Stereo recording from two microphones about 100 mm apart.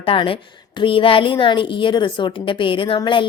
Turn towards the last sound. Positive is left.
turn(degrees=55)  # may be behind; listen again after turning